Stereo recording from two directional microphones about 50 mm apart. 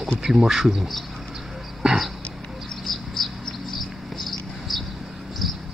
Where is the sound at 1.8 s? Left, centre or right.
Centre.